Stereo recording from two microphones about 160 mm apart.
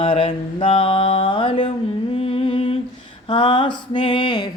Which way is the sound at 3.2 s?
30° left (ahead or behind).